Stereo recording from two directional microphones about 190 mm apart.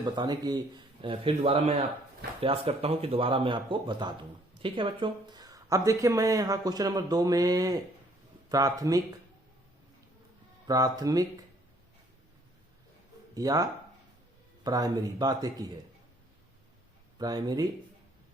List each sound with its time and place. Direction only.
0.0 s speech: 20° right (ahead or behind)
10.7 s speech: 20° right (ahead or behind)
13.3 s speech: 20° right (ahead or behind)
17.2 s speech: 20° right (ahead or behind)